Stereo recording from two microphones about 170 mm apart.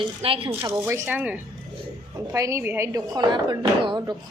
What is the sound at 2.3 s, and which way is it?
A woman's voice, 15° right (ahead or behind).